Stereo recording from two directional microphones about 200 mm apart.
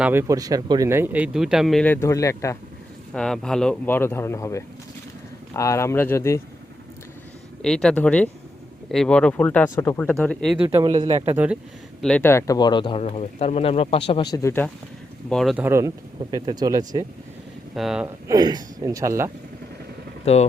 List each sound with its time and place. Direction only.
0.0 s speech: 10° right (ahead or behind); by 2.6 s 15° left (ahead or behind)
3.1 s speech: 5° left (ahead or behind)
7.6 s speech: 5° left (ahead or behind)
10.7 s speech: 20° right (ahead or behind)
12.0 s speech: 10° left (ahead or behind)
15.3 s speech: centre (ahead or behind)
15.6 s speech: 15° right (ahead or behind)
17.7 s speech: 5° right (ahead or behind)
18.3 s speech: 20° right (ahead or behind)
20.2 s speech: 30° left (ahead or behind)